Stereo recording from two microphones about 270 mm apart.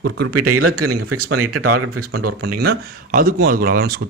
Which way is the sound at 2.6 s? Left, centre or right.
Right.